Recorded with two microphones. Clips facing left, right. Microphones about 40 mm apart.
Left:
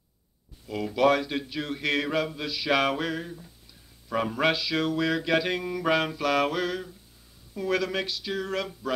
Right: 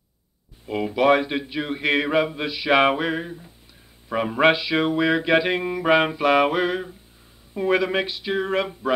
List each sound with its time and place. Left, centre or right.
0.7 s speech: right